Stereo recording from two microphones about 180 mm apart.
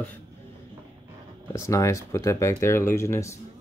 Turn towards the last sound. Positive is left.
turn(degrees=15)  # may be behind; listen again after turning